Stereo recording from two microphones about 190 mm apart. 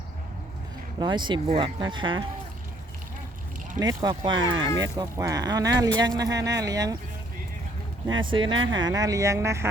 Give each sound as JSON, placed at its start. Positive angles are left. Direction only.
{"t": 0.9, "sound": "speech", "side_deg": -25}
{"t": 3.8, "sound": "speech", "side_deg": -20}
{"t": 8.3, "sound": "speech", "side_deg": -25}